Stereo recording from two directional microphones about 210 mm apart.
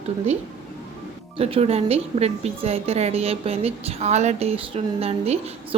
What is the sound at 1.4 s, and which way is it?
A woman's voice, 30° right (ahead or behind).